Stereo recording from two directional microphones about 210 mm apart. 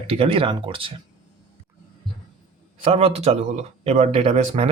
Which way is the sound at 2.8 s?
30° right (ahead or behind).